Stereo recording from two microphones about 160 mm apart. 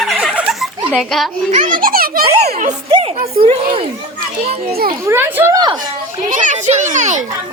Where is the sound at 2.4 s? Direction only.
45° right (ahead or behind).